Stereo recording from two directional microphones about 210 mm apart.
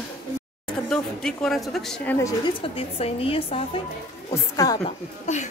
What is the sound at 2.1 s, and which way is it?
Music, 20° left (ahead or behind).